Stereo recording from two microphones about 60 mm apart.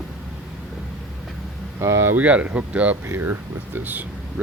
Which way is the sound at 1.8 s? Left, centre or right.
Right.